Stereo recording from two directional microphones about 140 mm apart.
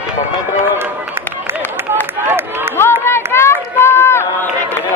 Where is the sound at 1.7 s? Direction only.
15° right (ahead or behind).